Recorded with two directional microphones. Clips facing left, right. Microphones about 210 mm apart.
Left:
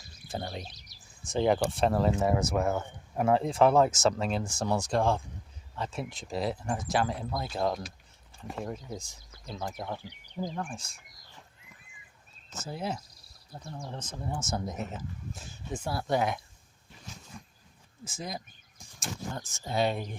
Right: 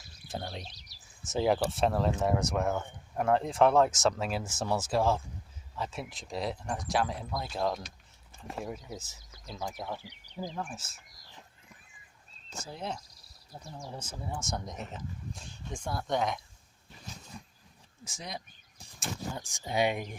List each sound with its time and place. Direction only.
0.0 s a sound: centre (ahead or behind)
1.2 s speech: 5° right (ahead or behind)
12.6 s speech: 5° left (ahead or behind)
13.8 s speech: 10° right (ahead or behind)
17.1 s a sound: 35° right (ahead or behind)
18.0 s speech: centre (ahead or behind)
18.9 s speech: 10° right (ahead or behind)